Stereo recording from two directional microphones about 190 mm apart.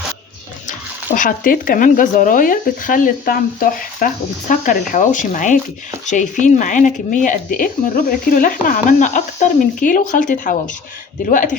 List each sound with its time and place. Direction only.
1.1 s speech: 45° left (ahead or behind)